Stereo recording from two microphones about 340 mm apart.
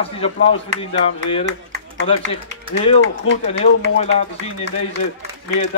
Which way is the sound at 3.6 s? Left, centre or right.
Centre.